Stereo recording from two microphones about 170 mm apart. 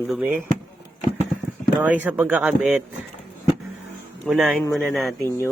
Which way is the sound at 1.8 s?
10° right (ahead or behind).